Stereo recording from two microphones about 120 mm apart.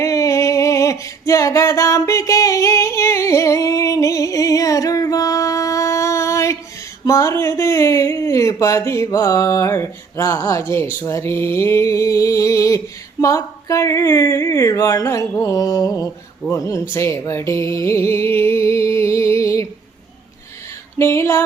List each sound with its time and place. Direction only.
0.0 s a sound: 25° left (ahead or behind)
7.0 s speech: 25° left (ahead or behind)
21.0 s speech: 25° left (ahead or behind)